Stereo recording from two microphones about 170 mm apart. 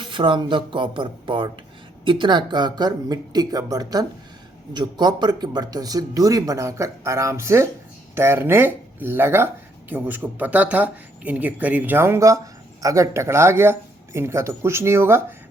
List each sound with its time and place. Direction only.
0.0 s speech: 30° right (ahead or behind)